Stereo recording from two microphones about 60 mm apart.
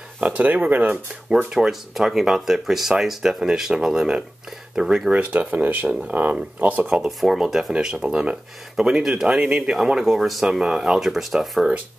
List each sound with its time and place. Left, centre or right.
0.2 s speech: right
1.5 s speech: centre
5.1 s speech: right
7.1 s speech: centre
9.7 s speech: centre